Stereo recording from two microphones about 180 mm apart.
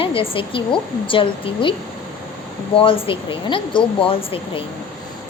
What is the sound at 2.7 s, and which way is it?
A woman's voice, 30° left (ahead or behind).